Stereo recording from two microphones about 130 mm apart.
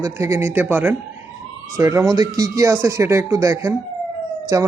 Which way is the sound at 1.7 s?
25° right (ahead or behind).